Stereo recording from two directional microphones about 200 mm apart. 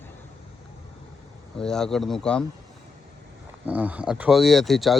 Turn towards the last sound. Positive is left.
turn(degrees=0)  # may be behind; listen again after turning